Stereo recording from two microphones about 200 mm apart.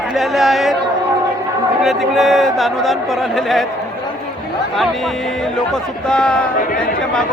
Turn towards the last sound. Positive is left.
turn(degrees=5)  # may be behind; listen again after turning